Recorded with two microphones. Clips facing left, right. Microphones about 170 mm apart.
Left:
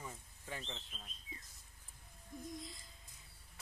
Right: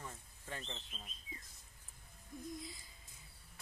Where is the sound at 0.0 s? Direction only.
10° left (ahead or behind).